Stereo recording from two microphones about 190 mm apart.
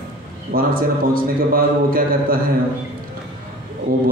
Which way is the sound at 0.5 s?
50° right (ahead or behind).